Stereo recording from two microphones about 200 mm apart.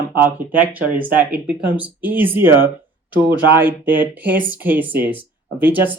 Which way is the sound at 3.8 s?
10° right (ahead or behind).